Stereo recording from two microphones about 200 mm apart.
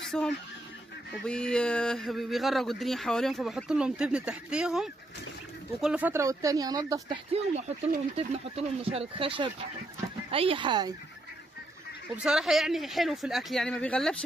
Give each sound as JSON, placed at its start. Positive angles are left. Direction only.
{"t": 0.0, "sound": "fowl", "side_deg": 5}
{"t": 1.2, "sound": "speech", "side_deg": 5}
{"t": 7.3, "sound": "speech", "side_deg": -35}
{"t": 12.2, "sound": "speech", "side_deg": -5}